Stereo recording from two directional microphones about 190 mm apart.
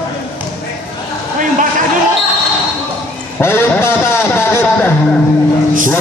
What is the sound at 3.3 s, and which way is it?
Music, 10° left (ahead or behind).